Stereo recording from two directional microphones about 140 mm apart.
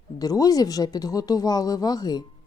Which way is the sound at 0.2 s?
25° left (ahead or behind).